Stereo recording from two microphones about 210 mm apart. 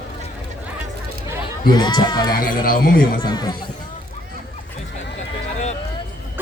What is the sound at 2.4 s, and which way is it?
Speech, 45° left (ahead or behind).